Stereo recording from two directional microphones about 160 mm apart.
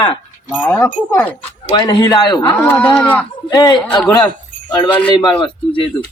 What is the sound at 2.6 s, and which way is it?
Speech, 10° left (ahead or behind).